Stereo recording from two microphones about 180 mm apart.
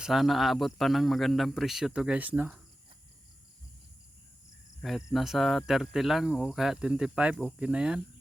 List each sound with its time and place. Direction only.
0.0 s speech: centre (ahead or behind)
4.8 s speech: centre (ahead or behind)